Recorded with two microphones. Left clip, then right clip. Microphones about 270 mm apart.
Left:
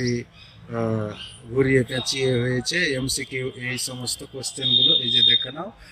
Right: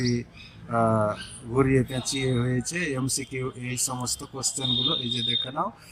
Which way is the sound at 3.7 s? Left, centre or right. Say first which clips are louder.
Even; centre.